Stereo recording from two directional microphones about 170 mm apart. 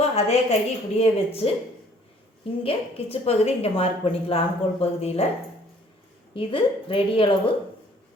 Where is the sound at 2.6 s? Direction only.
35° left (ahead or behind).